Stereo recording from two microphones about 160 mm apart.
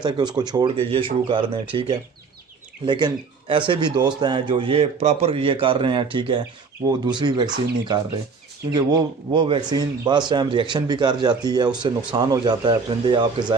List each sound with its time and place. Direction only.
0.0 s a man's voice: 25° right (ahead or behind)
2.8 s a man's voice: 30° right (ahead or behind)